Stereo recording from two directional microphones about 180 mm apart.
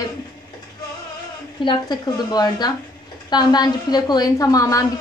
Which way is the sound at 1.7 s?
20° left (ahead or behind).